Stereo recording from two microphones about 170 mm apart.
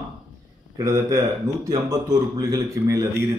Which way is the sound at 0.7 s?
15° right (ahead or behind).